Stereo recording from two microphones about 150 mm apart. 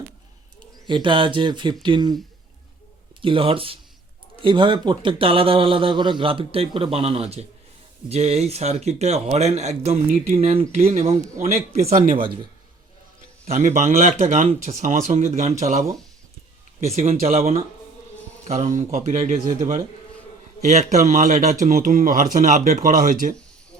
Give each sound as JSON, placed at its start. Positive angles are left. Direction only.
{"t": 0.9, "sound": "speech", "side_deg": -35}
{"t": 3.2, "sound": "speech", "side_deg": -35}
{"t": 13.5, "sound": "speech", "side_deg": -50}
{"t": 16.8, "sound": "speech", "side_deg": -45}